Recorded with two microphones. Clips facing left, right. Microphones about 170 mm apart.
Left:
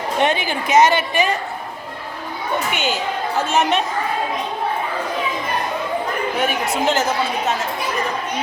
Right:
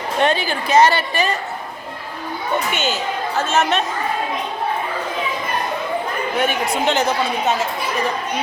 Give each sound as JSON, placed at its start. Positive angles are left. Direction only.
{"t": 0.2, "sound": "a woman's voice", "side_deg": 15}
{"t": 2.7, "sound": "a woman's voice", "side_deg": 15}
{"t": 6.4, "sound": "speech", "side_deg": 5}